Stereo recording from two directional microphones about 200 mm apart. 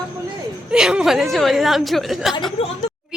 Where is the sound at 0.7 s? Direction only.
5° right (ahead or behind).